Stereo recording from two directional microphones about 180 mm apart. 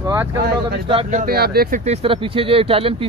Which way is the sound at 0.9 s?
30° right (ahead or behind).